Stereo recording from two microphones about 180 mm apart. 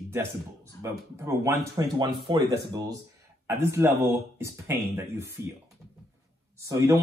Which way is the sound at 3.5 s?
15° right (ahead or behind).